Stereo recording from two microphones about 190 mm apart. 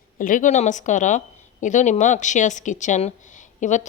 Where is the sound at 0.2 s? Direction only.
45° left (ahead or behind).